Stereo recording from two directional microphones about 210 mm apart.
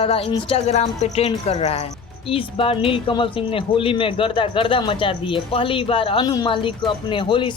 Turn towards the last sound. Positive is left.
turn(degrees=25)  # may be behind; listen again after turning